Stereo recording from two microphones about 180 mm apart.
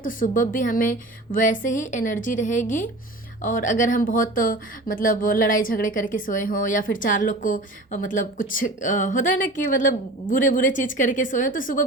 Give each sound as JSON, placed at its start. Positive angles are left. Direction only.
{"t": 0.0, "sound": "speech", "side_deg": 50}